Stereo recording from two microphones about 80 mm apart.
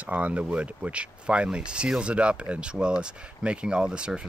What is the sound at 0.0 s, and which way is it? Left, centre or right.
Speech, centre.